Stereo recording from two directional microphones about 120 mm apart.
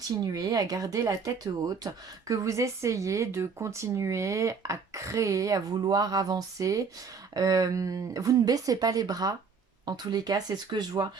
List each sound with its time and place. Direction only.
0.1 s speech: 35° right (ahead or behind)